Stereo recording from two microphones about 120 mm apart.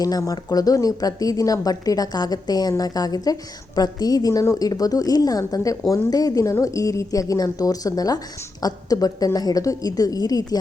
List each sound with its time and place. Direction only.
0.0 s a woman's voice: 30° left (ahead or behind)